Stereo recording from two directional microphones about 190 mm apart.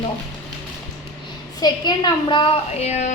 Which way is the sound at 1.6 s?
20° left (ahead or behind).